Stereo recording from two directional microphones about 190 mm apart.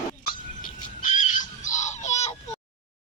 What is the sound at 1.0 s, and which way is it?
Pig, 40° left (ahead or behind).